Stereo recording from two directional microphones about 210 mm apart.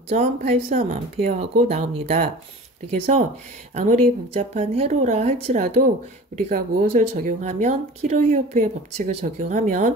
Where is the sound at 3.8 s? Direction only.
30° right (ahead or behind).